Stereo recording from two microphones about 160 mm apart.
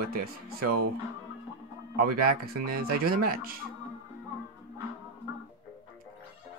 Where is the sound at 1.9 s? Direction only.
70° right (ahead or behind).